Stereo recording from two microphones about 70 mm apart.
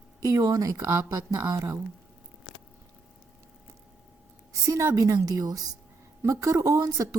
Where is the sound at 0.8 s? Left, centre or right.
Right.